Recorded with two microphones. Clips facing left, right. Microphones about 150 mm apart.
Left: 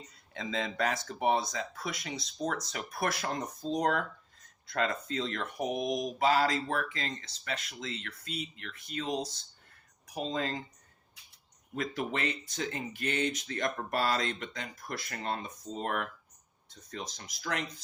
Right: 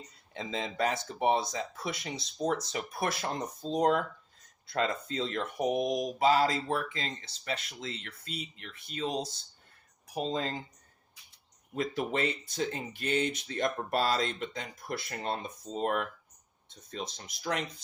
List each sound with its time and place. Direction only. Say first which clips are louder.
0.3 s speech: even; 30° right (ahead or behind)
11.7 s speech: right 2 dB; 30° right (ahead or behind)
17.2 s speech: right 2 dB; 30° right (ahead or behind)